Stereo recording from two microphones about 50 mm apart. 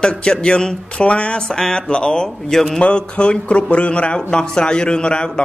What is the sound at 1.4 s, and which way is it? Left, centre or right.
A man's voice, centre.